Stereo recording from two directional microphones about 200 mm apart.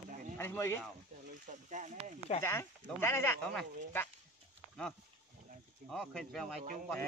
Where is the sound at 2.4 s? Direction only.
10° left (ahead or behind).